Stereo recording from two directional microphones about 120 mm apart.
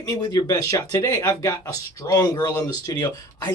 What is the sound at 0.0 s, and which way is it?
Speech, 30° left (ahead or behind).